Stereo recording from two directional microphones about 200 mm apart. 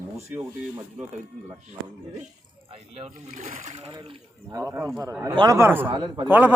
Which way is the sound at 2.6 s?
30° right (ahead or behind).